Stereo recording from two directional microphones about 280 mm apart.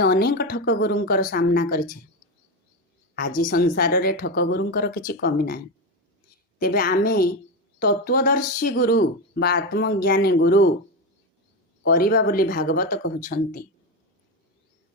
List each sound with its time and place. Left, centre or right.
0.0 s speech: left
3.2 s speech: left
6.6 s speech: left
11.9 s speech: left